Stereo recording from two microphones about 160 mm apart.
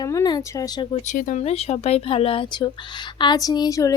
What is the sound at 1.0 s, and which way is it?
Speech, 55° left (ahead or behind).